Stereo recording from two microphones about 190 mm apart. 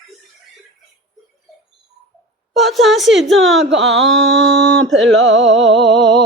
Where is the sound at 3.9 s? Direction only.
80° right.